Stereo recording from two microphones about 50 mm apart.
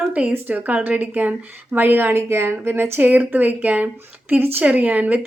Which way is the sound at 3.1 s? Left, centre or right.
Right.